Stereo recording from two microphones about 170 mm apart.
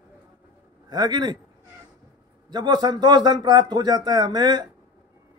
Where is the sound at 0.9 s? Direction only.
25° right (ahead or behind).